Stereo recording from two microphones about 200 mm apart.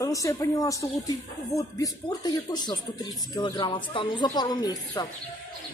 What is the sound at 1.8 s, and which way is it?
Speech, 20° left (ahead or behind).